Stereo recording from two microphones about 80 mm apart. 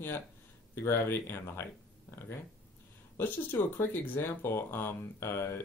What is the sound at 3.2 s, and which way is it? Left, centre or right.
Speech, left.